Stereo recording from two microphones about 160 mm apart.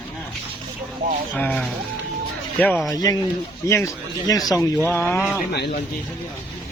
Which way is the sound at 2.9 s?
25° left (ahead or behind).